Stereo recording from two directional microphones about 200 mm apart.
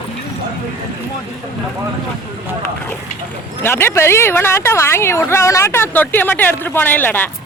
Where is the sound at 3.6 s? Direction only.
10° left (ahead or behind).